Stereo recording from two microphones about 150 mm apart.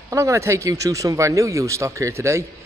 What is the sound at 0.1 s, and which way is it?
A man's voice, 20° right (ahead or behind).